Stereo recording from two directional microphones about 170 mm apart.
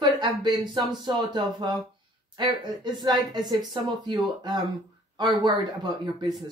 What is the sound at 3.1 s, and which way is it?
Speech, 30° right (ahead or behind).